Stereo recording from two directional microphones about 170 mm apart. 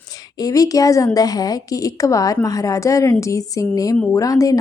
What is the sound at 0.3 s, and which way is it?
Speech, 20° left (ahead or behind).